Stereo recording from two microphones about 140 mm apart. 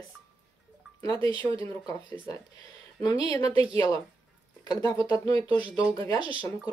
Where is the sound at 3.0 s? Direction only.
30° left (ahead or behind).